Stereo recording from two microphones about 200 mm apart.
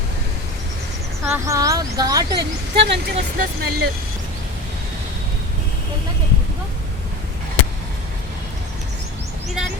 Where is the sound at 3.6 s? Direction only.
50° right (ahead or behind).